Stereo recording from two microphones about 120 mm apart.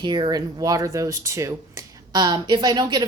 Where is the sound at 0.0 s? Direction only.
40° right (ahead or behind).